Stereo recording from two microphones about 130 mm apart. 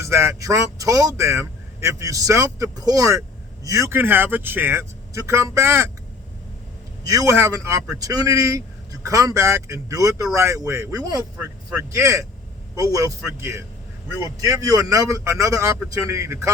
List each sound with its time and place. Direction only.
0.0 s speech: 20° right (ahead or behind)
7.1 s speech: 25° right (ahead or behind)